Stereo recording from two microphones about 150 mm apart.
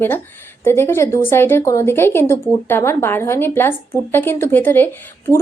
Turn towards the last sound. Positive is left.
turn(degrees=15)  # may be behind; listen again after turning